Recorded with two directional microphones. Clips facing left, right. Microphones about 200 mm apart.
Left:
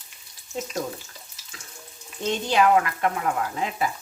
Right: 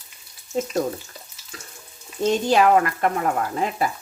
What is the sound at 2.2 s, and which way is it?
Speech, 40° right (ahead or behind).